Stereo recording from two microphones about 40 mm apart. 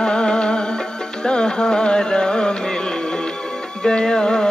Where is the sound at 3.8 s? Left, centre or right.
Centre.